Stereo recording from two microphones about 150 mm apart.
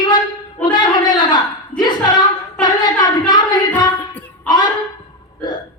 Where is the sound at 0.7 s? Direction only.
30° left (ahead or behind).